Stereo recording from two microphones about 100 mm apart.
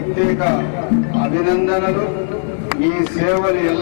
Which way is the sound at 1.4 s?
20° left (ahead or behind).